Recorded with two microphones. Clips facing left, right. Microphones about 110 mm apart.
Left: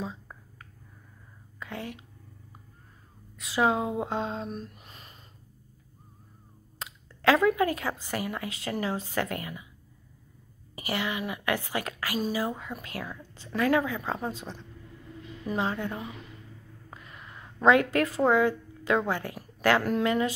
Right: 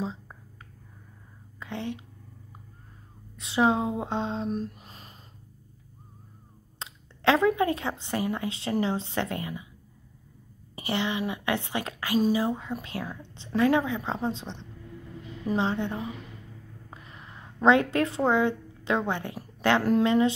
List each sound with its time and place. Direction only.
1.6 s speech: 25° right (ahead or behind)
3.3 s a woman's voice: 25° right (ahead or behind)
4.5 s a sound: 35° right (ahead or behind)
6.8 s a woman's voice: 25° right (ahead or behind)
10.8 s a woman's voice: 25° right (ahead or behind)